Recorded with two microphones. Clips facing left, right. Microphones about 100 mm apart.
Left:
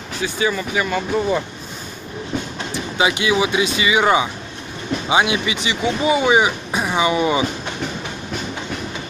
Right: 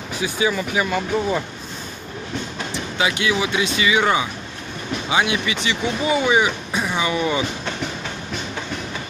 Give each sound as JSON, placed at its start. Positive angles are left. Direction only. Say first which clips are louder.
{"t": 0.2, "sound": "speech", "louder": "even", "side_deg": -10}
{"t": 3.0, "sound": "speech", "louder": "left 3 dB", "side_deg": 15}